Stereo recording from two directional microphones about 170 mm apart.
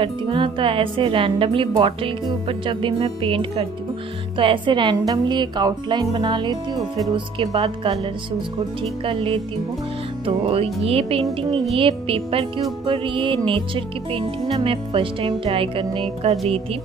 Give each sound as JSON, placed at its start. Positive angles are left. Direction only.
{"t": 0.0, "sound": "speech", "side_deg": -30}
{"t": 7.5, "sound": "speech", "side_deg": -35}
{"t": 9.0, "sound": "speech", "side_deg": -30}